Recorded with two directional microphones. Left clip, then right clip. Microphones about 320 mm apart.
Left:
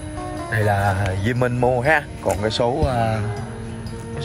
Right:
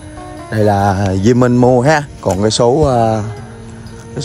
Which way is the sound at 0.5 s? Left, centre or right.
Centre.